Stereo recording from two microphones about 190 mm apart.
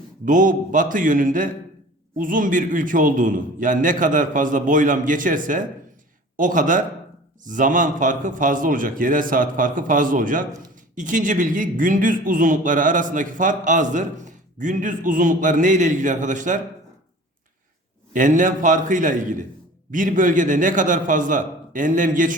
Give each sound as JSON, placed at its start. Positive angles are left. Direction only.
{"t": 0.3, "sound": "a man's voice", "side_deg": -45}
{"t": 18.1, "sound": "a man's voice", "side_deg": -45}